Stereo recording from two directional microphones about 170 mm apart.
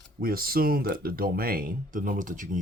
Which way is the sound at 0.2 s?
60° right (ahead or behind).